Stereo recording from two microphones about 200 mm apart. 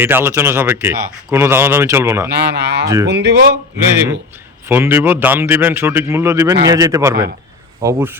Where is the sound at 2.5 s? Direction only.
55° right (ahead or behind).